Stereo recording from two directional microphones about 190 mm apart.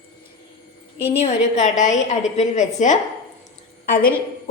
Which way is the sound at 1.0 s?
35° left (ahead or behind).